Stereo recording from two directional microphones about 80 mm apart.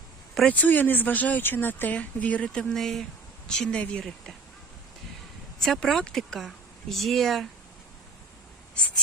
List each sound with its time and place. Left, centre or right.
0.4 s speech: left
5.6 s speech: centre